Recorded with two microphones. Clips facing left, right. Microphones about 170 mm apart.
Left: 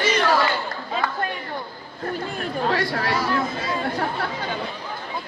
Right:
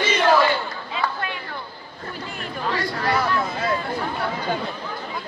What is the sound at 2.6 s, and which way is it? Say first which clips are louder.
Chatter: left 2 dB; 60° left (ahead or behind).